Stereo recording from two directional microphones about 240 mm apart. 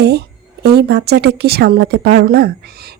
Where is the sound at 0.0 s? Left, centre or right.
Right.